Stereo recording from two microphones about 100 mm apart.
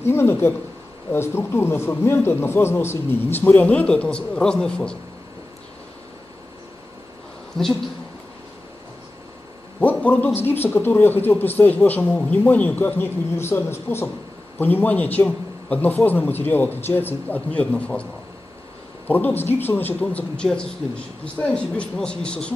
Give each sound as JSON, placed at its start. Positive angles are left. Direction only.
{"t": 0.0, "sound": "a man's voice", "side_deg": 25}
{"t": 9.8, "sound": "a man's voice", "side_deg": 15}
{"t": 19.0, "sound": "a man's voice", "side_deg": 20}